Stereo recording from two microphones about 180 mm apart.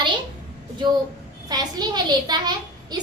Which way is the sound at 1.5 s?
20° right (ahead or behind).